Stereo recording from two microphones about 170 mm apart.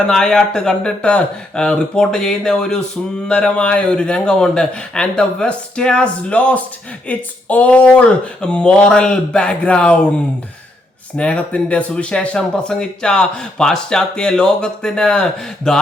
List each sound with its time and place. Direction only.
0.1 s speech: 5° left (ahead or behind)
11.2 s speech: 5° left (ahead or behind)